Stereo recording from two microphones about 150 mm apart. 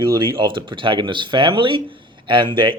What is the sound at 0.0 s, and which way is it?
Speech, 30° right (ahead or behind).